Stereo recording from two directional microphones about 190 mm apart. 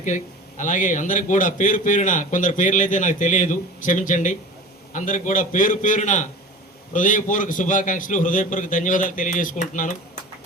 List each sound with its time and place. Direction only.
0.0 s a man's voice: 40° left (ahead or behind)